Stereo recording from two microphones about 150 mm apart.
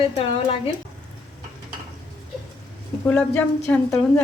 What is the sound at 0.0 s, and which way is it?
Speech, 40° left (ahead or behind).